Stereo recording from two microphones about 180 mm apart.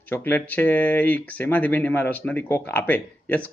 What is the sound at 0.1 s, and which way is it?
Speech, 10° left (ahead or behind).